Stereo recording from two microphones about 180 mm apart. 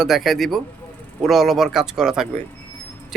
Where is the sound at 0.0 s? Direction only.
Centre (ahead or behind).